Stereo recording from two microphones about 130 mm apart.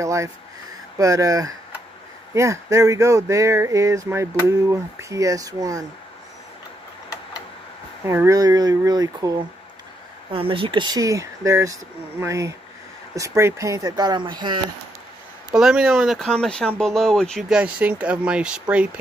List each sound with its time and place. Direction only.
0.0 s speech: 25° right (ahead or behind)
8.0 s speech: 20° right (ahead or behind)
10.3 s speech: 45° right (ahead or behind)
15.5 s speech: 5° right (ahead or behind)
17.5 s speech: 10° right (ahead or behind)